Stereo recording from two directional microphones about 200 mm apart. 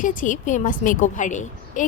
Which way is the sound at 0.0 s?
40° left (ahead or behind).